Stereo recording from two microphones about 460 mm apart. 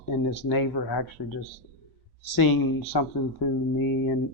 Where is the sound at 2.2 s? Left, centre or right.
Left.